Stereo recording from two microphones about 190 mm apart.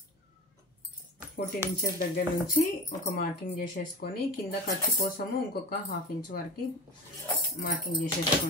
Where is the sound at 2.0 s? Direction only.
45° left (ahead or behind).